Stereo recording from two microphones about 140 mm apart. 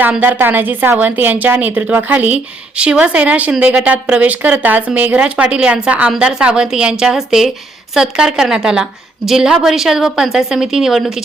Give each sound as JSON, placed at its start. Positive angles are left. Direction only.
{"t": 0.0, "sound": "a woman's voice", "side_deg": -10}